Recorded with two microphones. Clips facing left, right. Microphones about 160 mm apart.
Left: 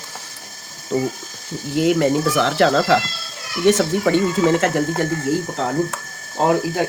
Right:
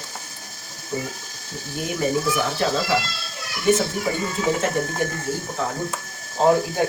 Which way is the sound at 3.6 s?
90° left.